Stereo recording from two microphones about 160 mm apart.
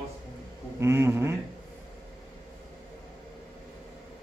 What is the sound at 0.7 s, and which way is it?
Speech, 15° right (ahead or behind).